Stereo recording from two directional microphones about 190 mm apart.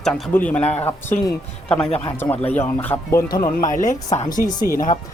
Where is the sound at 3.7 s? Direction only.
40° left (ahead or behind).